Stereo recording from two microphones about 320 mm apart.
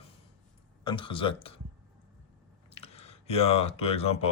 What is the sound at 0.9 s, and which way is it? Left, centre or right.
Speech, centre.